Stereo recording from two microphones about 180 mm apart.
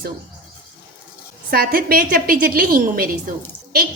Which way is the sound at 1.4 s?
55° right (ahead or behind).